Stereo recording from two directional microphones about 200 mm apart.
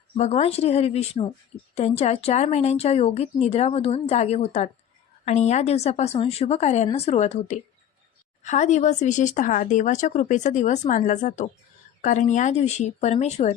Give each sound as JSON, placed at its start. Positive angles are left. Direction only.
{"t": 0.2, "sound": "speech", "side_deg": 35}